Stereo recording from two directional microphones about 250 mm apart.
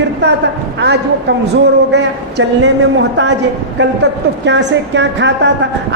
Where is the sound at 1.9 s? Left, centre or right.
Right.